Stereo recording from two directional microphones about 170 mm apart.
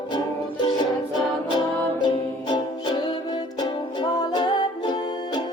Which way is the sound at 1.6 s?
25° left (ahead or behind).